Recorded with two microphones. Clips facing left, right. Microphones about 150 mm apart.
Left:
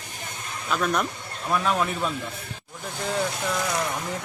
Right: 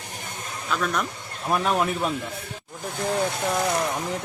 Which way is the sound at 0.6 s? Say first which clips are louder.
Left 1 dB; 5° left (ahead or behind).